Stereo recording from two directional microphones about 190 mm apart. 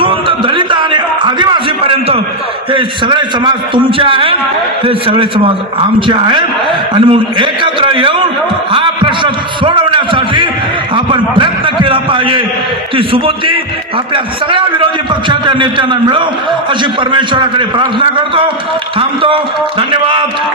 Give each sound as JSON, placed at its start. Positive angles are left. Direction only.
{"t": 0.0, "sound": "a sound", "side_deg": -25}
{"t": 2.7, "sound": "a man's voice", "side_deg": -25}
{"t": 10.9, "sound": "a sound", "side_deg": -25}
{"t": 13.0, "sound": "a man's voice", "side_deg": -30}
{"t": 15.3, "sound": "a man's voice", "side_deg": -25}
{"t": 18.9, "sound": "a man's voice", "side_deg": -25}